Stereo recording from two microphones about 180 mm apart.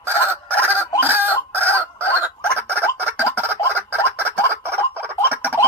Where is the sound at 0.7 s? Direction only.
10° right (ahead or behind).